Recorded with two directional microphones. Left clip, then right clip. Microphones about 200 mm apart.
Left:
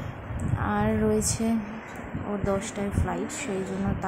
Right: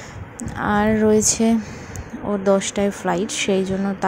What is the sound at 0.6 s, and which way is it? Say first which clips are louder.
A woman's voice: right 8 dB; 30° right (ahead or behind).